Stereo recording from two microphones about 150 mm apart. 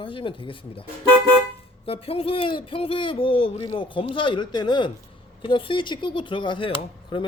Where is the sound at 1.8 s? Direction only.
40° left (ahead or behind).